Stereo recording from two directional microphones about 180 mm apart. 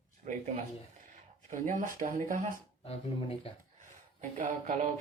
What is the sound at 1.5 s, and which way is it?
Speech, 45° right (ahead or behind).